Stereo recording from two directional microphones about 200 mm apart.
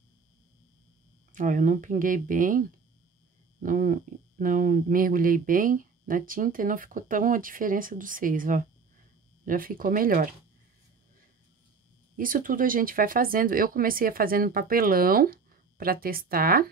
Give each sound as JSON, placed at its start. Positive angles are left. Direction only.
{"t": 1.3, "sound": "speech", "side_deg": -40}
{"t": 3.6, "sound": "speech", "side_deg": -45}
{"t": 12.2, "sound": "speech", "side_deg": -45}